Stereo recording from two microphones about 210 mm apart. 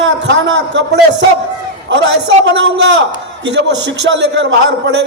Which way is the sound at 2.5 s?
60° right (ahead or behind).